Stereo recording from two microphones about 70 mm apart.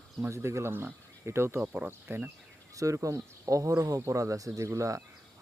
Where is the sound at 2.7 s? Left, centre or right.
Right.